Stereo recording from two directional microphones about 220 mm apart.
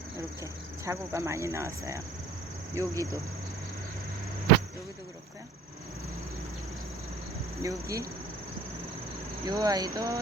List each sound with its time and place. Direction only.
0.9 s speech: 15° right (ahead or behind)
7.6 s speech: 15° right (ahead or behind)
9.5 s speech: 15° right (ahead or behind)